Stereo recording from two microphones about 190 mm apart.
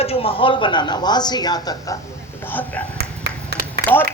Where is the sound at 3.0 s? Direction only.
60° right (ahead or behind).